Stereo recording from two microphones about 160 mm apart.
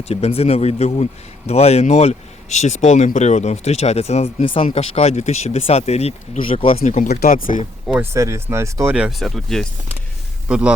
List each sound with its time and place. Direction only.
0.0 s speech: 40° left (ahead or behind)
6.8 s speech: 45° left (ahead or behind)
7.2 s speech: 60° left (ahead or behind)
8.1 s speech: 20° right (ahead or behind); by 9.6 s centre (ahead or behind)